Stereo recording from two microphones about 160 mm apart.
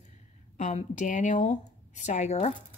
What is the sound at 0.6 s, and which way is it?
A woman's voice, 50° left (ahead or behind).